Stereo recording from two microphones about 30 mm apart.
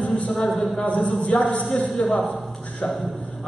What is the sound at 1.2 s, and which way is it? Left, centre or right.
Speech, left.